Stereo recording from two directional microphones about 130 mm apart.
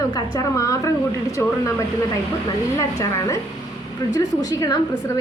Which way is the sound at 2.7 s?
25° left (ahead or behind).